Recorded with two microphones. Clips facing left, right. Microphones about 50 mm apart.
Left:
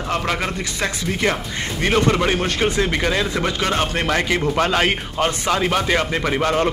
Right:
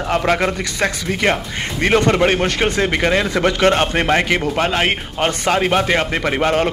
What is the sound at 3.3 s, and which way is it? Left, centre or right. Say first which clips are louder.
Speech: right 6 dB; right.